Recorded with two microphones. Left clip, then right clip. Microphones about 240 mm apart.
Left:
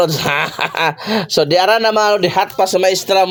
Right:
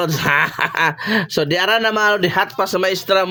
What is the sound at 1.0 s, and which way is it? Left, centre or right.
Speech, right.